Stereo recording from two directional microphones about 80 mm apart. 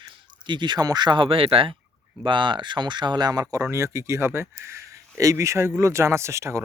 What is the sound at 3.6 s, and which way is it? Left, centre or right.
A man's voice, right.